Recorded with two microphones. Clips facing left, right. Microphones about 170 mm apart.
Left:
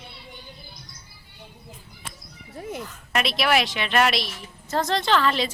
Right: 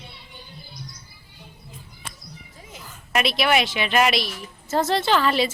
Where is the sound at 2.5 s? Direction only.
60° left (ahead or behind).